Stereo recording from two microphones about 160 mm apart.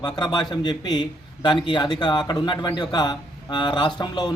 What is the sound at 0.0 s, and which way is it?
A man's voice, 25° left (ahead or behind).